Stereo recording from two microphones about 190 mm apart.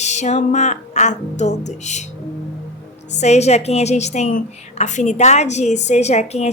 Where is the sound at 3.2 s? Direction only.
35° left (ahead or behind).